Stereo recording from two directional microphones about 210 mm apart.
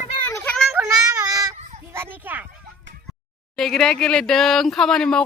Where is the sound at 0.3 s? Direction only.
15° left (ahead or behind).